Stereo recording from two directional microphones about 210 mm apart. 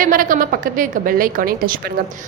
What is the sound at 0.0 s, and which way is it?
A woman's voice, 40° right (ahead or behind).